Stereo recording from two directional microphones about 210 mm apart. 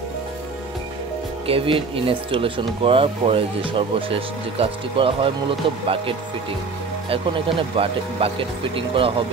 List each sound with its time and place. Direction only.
1.5 s speech: 25° right (ahead or behind)
7.1 s speech: 25° right (ahead or behind)